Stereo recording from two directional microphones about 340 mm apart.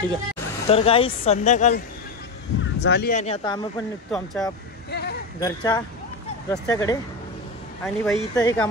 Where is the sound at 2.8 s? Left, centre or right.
Left.